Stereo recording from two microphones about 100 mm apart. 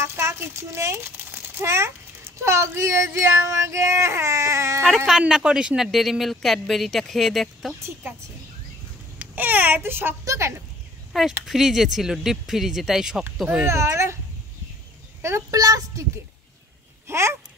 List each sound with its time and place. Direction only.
0.0 s a sound: 25° right (ahead or behind)
2.4 s speech: 30° right (ahead or behind)
4.8 s speech: 5° right (ahead or behind)
9.2 s a child's voice: 15° right (ahead or behind)
11.4 s speech: 5° right (ahead or behind)
13.7 s speech: 30° right (ahead or behind)
15.2 s speech: 25° right (ahead or behind)
17.1 s speech: 25° right (ahead or behind)